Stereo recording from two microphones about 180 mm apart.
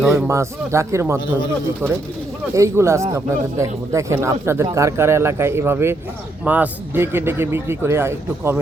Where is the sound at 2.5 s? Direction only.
15° right (ahead or behind).